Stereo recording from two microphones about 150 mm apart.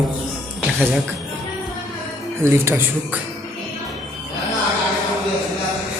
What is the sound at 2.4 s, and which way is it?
Speech, 15° right (ahead or behind).